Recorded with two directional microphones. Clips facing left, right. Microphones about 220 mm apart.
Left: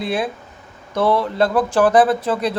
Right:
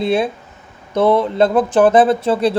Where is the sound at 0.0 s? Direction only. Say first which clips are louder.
Right 5 dB; 25° right (ahead or behind).